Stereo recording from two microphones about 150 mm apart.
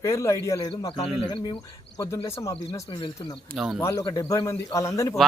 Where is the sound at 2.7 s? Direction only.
30° left (ahead or behind).